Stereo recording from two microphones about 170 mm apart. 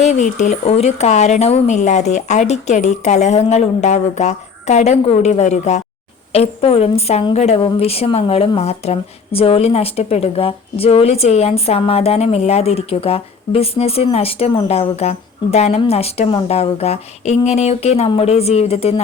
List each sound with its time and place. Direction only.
0.0 s a woman's voice: 45° left (ahead or behind)